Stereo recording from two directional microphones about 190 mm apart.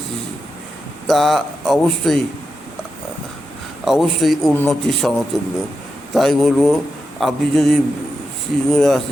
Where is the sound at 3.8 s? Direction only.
Centre (ahead or behind).